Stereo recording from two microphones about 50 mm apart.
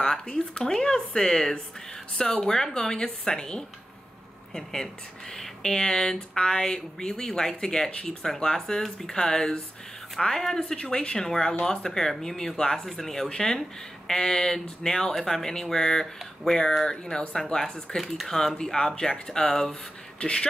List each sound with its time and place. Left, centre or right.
0.0 s speech: centre
5.3 s speech: centre
10.7 s speech: centre
18.6 s speech: centre